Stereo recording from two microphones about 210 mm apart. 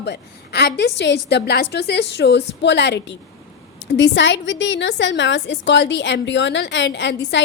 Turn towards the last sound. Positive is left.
turn(degrees=60)  # may be behind; listen again after turning